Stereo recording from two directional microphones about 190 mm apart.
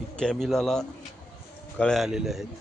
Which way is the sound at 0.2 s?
Centre (ahead or behind).